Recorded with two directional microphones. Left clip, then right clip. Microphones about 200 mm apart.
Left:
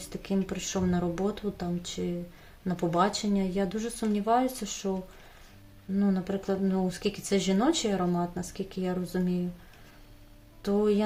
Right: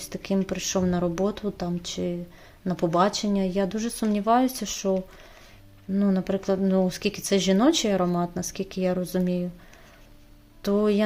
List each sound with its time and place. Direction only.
0.0 s speech: 35° right (ahead or behind)
6.0 s speech: 35° right (ahead or behind)
10.6 s speech: 35° right (ahead or behind)